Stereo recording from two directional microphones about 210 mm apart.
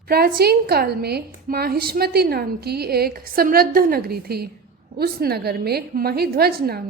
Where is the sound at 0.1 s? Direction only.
45° right (ahead or behind).